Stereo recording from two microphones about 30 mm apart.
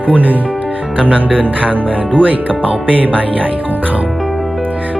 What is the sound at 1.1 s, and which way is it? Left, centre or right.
Speech, right.